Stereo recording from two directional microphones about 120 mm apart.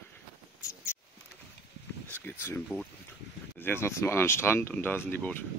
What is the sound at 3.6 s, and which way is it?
Speech, 20° left (ahead or behind).